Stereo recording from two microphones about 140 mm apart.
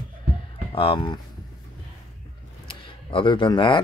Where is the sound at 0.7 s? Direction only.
35° left (ahead or behind).